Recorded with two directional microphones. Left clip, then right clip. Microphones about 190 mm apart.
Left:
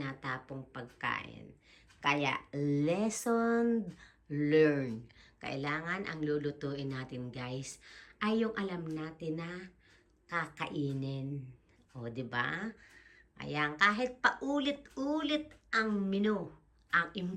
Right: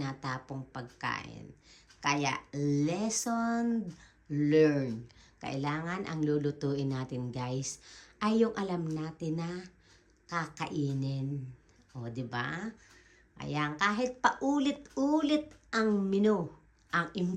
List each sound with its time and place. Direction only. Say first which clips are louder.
0.0 s a woman's voice: right 1 dB; 15° right (ahead or behind)